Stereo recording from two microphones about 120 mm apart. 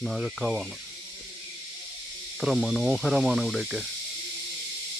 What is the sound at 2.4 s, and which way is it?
Speech, centre (ahead or behind).